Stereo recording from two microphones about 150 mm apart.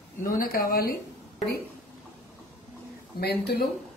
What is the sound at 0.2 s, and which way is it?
Speech, 70° left (ahead or behind).